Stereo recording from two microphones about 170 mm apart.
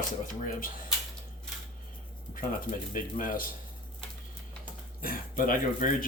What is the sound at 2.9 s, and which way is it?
Speech, 55° left (ahead or behind).